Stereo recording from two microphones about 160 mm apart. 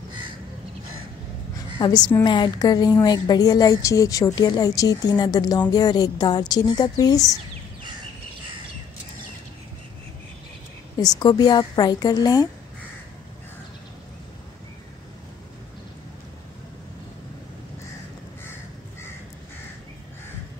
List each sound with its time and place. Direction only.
1.8 s a woman's voice: 25° left (ahead or behind)
11.0 s a woman's voice: 25° left (ahead or behind)